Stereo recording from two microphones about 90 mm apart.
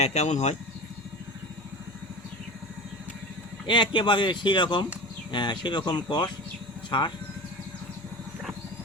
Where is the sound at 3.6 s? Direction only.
60° left (ahead or behind).